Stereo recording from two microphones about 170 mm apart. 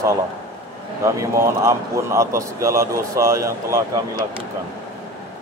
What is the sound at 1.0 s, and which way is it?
Speech, 15° right (ahead or behind).